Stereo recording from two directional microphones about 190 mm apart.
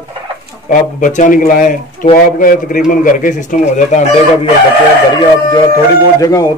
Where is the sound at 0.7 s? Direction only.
45° left (ahead or behind).